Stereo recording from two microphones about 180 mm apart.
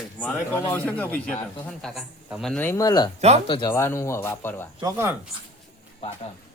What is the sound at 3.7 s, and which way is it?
Speech, 15° left (ahead or behind).